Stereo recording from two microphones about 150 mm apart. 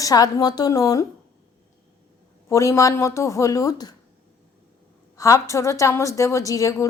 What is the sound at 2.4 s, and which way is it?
A woman's voice, 20° left (ahead or behind).